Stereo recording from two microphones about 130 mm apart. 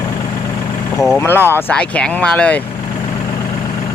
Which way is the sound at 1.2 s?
15° left (ahead or behind).